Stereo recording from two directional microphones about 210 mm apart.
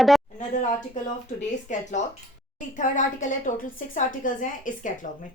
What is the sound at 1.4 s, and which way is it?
A woman's voice, 35° left (ahead or behind).